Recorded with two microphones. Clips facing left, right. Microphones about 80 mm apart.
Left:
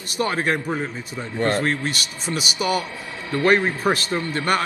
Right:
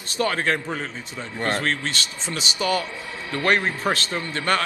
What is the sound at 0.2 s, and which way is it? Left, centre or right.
A man's voice, left.